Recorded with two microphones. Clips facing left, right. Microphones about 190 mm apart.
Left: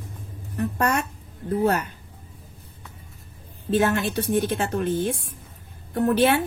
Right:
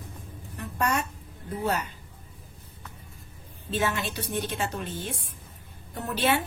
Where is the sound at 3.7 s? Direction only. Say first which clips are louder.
Left 7 dB; 50° left (ahead or behind).